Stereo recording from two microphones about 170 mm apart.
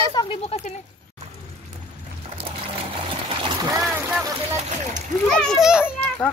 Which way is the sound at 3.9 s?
15° right (ahead or behind).